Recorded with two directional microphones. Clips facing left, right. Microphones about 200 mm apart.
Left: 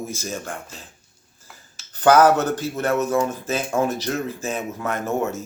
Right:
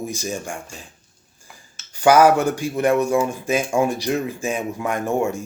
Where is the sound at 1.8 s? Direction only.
10° right (ahead or behind).